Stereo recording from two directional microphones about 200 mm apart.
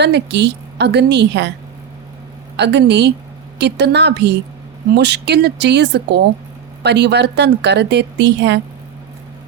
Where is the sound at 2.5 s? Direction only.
60° right (ahead or behind).